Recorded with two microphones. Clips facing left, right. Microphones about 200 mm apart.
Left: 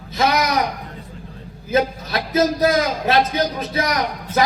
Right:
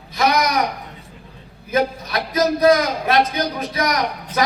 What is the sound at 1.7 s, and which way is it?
A man's voice, 25° left (ahead or behind).